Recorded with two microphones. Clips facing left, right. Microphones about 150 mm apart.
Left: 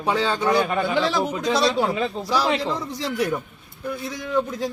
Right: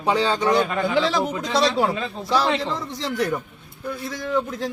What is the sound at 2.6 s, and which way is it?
Speech, centre (ahead or behind).